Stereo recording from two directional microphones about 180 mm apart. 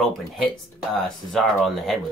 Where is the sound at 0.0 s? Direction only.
Centre (ahead or behind).